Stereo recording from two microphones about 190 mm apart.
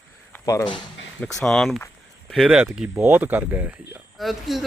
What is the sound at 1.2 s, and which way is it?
Speech, centre (ahead or behind).